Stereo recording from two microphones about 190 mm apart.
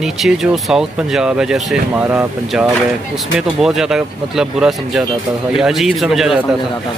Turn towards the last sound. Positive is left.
turn(degrees=0)  # may be behind; listen again after turning